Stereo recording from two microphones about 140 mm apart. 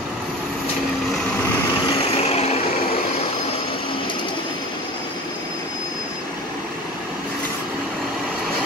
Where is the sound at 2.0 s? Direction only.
45° left (ahead or behind).